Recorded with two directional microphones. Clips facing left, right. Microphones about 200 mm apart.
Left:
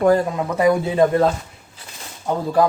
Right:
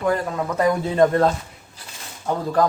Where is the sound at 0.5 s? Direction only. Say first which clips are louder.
Left 3 dB; 10° left (ahead or behind).